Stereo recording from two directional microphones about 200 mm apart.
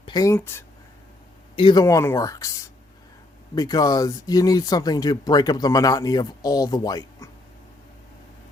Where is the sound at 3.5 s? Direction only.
20° left (ahead or behind).